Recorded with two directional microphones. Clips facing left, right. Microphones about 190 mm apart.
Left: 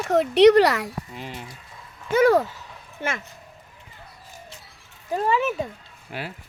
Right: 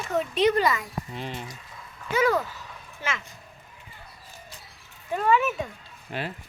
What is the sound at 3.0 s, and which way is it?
Speech, 50° left (ahead or behind).